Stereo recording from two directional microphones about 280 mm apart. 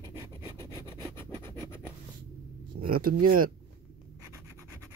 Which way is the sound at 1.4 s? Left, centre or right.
Centre.